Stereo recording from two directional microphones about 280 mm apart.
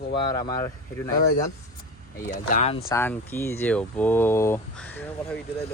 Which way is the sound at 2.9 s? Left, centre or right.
Centre.